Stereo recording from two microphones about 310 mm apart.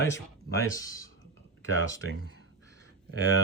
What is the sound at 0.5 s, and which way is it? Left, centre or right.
Speech, centre.